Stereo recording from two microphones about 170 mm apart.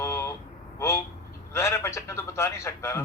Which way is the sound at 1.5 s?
15° left (ahead or behind).